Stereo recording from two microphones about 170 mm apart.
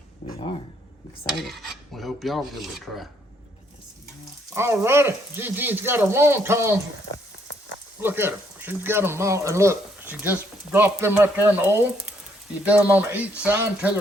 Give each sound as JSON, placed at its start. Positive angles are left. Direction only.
{"t": 0.2, "sound": "a sound", "side_deg": 40}
{"t": 1.3, "sound": "filing", "side_deg": 0}
{"t": 4.5, "sound": "speech", "side_deg": -15}
{"t": 8.0, "sound": "speech", "side_deg": -15}